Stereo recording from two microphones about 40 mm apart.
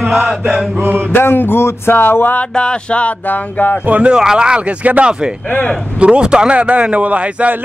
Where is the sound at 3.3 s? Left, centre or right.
Left.